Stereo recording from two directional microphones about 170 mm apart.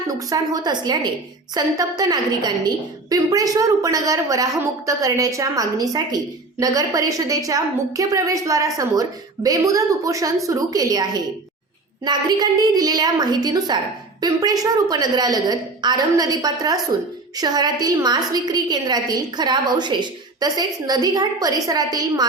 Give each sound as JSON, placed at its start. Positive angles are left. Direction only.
{"t": 0.1, "sound": "a woman's voice", "side_deg": -20}